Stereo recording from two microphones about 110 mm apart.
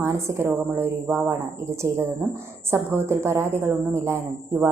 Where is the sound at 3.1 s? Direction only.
25° right (ahead or behind).